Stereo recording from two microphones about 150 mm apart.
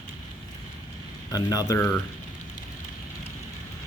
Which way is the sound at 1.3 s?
25° left (ahead or behind).